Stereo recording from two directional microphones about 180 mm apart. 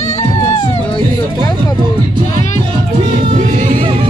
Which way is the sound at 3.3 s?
45° right (ahead or behind).